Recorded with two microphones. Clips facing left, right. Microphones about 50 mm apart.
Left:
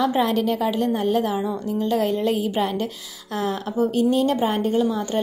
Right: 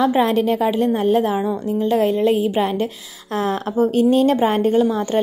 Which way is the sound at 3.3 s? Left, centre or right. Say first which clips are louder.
Right 4 dB; right.